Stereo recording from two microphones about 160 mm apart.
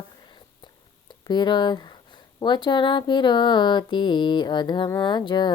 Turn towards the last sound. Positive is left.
turn(degrees=30)  # may be behind; listen again after turning